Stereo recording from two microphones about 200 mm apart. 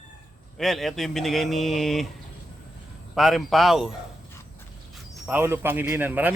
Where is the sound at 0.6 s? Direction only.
Centre (ahead or behind).